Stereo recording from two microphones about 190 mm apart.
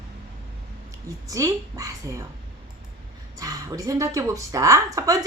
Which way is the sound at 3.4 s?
20° right (ahead or behind).